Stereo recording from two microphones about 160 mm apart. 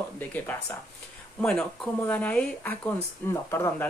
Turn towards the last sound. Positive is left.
turn(degrees=15)  # may be behind; listen again after turning